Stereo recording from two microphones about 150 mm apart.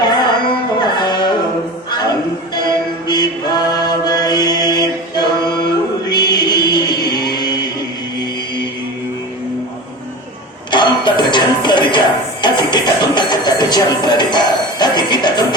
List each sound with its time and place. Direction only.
0.8 s music: 25° left (ahead or behind)
10.7 s music: 30° left (ahead or behind)